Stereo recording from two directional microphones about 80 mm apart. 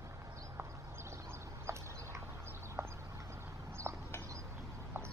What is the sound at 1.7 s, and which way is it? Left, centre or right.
Horse, right.